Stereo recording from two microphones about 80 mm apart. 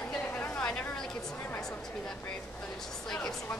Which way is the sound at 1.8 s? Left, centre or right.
Centre.